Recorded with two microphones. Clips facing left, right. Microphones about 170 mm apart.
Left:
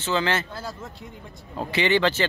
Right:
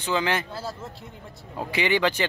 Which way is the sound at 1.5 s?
10° right (ahead or behind).